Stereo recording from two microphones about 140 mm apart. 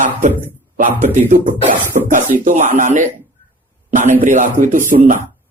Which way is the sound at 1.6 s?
70° right (ahead or behind).